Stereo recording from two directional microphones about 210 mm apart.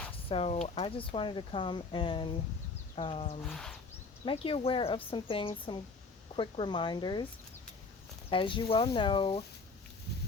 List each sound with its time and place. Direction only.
0.3 s speech: 30° left (ahead or behind)
3.5 s speech: centre (ahead or behind)
4.3 s speech: 25° left (ahead or behind)
8.3 s speech: 25° left (ahead or behind)